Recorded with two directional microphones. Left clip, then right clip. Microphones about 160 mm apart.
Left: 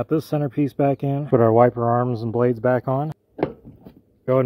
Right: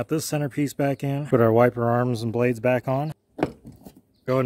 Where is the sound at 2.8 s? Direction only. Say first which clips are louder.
Left 2 dB; 20° right (ahead or behind).